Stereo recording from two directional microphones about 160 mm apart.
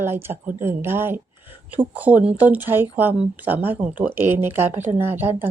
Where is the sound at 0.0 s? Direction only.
15° right (ahead or behind).